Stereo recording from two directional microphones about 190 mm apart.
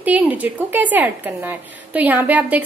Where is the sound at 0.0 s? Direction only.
10° right (ahead or behind).